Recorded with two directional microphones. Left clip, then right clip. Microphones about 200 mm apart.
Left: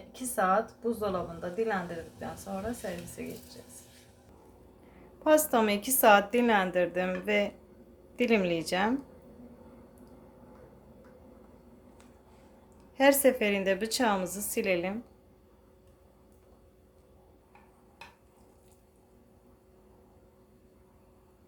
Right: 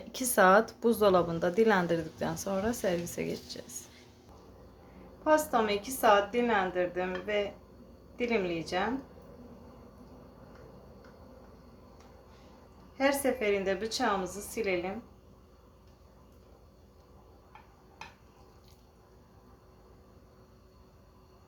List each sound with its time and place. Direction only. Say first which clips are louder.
0.1 s speech: right 5 dB; 45° right (ahead or behind)
5.2 s speech: left 2 dB; 40° left (ahead or behind)
13.0 s a woman's voice: left 5 dB; 40° left (ahead or behind)